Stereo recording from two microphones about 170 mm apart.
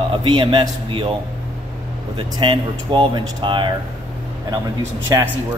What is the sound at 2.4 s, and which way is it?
A man's voice, 25° right (ahead or behind).